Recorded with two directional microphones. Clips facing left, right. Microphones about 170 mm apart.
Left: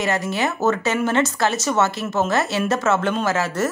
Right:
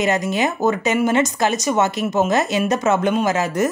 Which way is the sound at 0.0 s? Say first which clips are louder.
Right 3 dB; 20° right (ahead or behind).